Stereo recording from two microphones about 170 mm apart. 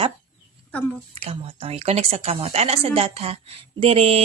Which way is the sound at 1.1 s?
35° right (ahead or behind).